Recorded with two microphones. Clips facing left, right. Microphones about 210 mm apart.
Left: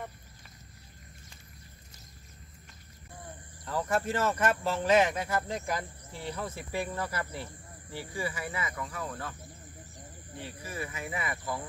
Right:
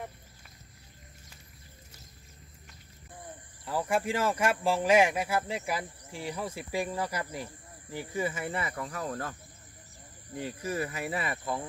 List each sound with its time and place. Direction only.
3.6 s speech: 10° right (ahead or behind); by 9.3 s 40° right (ahead or behind)
10.4 s cricket: 45° right (ahead or behind); by 11.6 s 25° right (ahead or behind)